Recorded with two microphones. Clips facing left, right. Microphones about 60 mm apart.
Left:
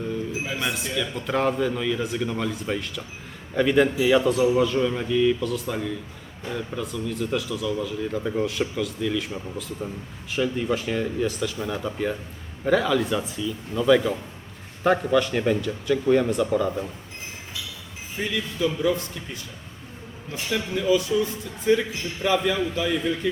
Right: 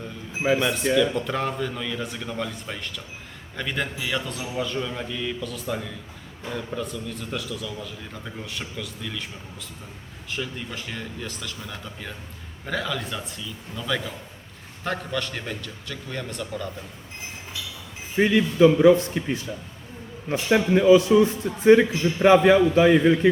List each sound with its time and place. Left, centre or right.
0.6 s a man's voice: centre
10.3 s a man's voice: centre
18.2 s a man's voice: right
19.2 s a man's voice: right
20.3 s a man's voice: right